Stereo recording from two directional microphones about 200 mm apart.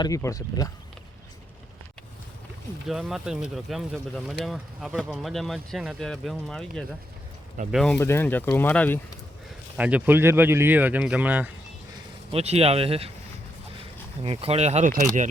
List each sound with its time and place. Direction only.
0.0 s speech: 15° left (ahead or behind)
2.8 s speech: centre (ahead or behind)
7.9 s speech: 10° left (ahead or behind)
9.7 s speech: 5° right (ahead or behind)
12.3 s speech: 30° right (ahead or behind)
14.3 s speech: 30° right (ahead or behind)